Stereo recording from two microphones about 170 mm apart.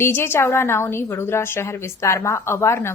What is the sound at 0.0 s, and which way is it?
A woman's voice, 15° left (ahead or behind).